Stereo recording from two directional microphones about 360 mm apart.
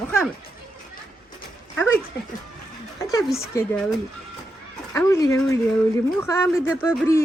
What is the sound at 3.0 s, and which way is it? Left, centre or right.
Speech, centre.